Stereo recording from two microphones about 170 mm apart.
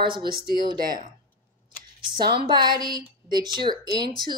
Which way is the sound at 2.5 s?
25° right (ahead or behind).